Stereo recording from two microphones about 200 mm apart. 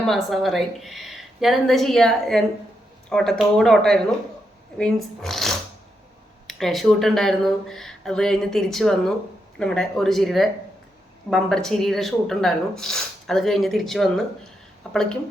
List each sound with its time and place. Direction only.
0.1 s speech: centre (ahead or behind)